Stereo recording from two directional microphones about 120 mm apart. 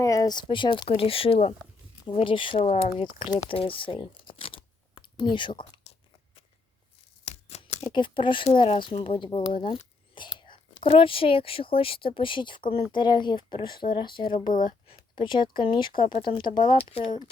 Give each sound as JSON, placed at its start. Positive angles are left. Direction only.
{"t": 0.0, "sound": "speech", "side_deg": 30}
{"t": 2.0, "sound": "speech", "side_deg": 45}
{"t": 7.3, "sound": "scissors", "side_deg": 60}
{"t": 7.9, "sound": "speech", "side_deg": 45}